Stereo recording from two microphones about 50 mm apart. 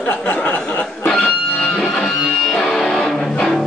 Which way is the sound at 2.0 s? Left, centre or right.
Centre.